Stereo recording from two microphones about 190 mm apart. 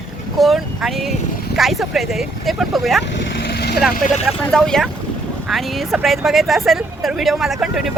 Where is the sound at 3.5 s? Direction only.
55° left (ahead or behind).